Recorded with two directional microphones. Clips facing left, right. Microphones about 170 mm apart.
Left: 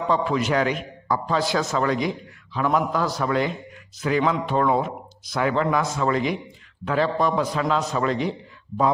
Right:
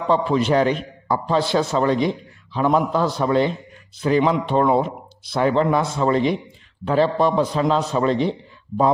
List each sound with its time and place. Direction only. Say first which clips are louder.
0.1 s a man's voice: right 5 dB; 30° right (ahead or behind)